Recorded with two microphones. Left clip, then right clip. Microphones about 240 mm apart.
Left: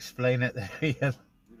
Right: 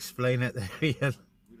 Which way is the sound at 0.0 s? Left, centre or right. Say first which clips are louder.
Left 2 dB; right.